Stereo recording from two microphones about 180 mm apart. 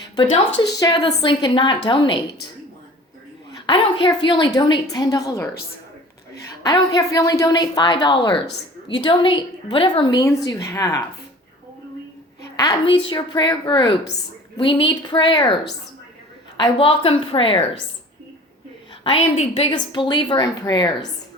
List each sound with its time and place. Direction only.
0.2 s a woman's voice: 25° left (ahead or behind)
3.7 s a woman's voice: 25° left (ahead or behind)
12.5 s a woman's voice: 25° left (ahead or behind)
16.6 s a woman's voice: 30° left (ahead or behind)
19.0 s a woman's voice: 35° left (ahead or behind)